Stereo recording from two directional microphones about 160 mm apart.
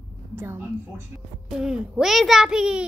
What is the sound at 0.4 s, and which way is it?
A woman's voice, 15° right (ahead or behind).